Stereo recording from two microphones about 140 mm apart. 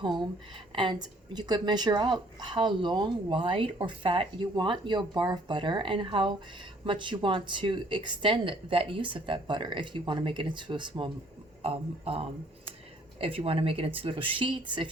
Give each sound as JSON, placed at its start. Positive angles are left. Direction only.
{"t": 0.2, "sound": "speech", "side_deg": -35}